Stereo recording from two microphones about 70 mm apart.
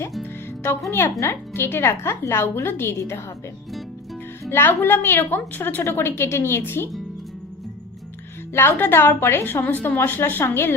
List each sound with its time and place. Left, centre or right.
0.9 s a woman's voice: left
4.4 s a woman's voice: left
8.5 s a woman's voice: left